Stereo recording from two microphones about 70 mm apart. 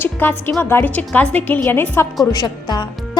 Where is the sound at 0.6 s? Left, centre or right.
Left.